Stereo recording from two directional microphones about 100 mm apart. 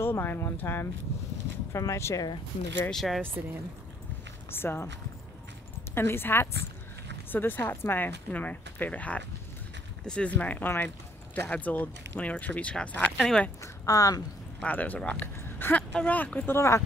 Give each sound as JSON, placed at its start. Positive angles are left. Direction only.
{"t": 0.0, "sound": "speech", "side_deg": 20}
{"t": 2.9, "sound": "speech", "side_deg": 5}
{"t": 4.5, "sound": "speech", "side_deg": 25}
{"t": 5.9, "sound": "speech", "side_deg": 25}
{"t": 13.2, "sound": "speech", "side_deg": 5}
{"t": 13.6, "sound": "speech", "side_deg": 35}
{"t": 14.6, "sound": "speech", "side_deg": 15}
{"t": 15.3, "sound": "a sound", "side_deg": 20}
{"t": 15.9, "sound": "speech", "side_deg": 15}
{"t": 16.5, "sound": "speech", "side_deg": 30}